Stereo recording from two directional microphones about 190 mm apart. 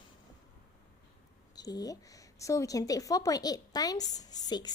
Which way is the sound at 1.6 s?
20° left (ahead or behind).